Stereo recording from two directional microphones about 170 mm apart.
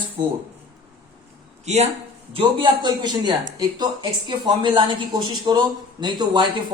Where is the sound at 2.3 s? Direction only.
30° right (ahead or behind).